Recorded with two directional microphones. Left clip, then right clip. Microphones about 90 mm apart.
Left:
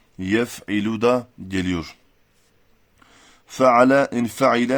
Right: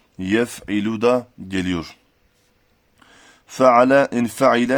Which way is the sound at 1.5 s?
15° right (ahead or behind).